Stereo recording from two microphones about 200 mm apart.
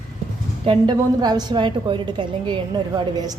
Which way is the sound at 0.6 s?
25° right (ahead or behind).